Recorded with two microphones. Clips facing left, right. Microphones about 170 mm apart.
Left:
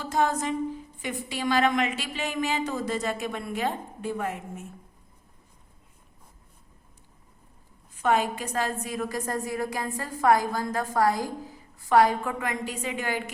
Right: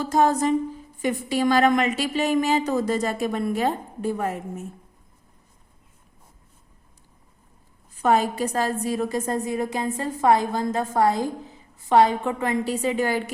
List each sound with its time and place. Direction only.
0.0 s a woman's voice: 40° right (ahead or behind)
8.0 s a woman's voice: 35° right (ahead or behind)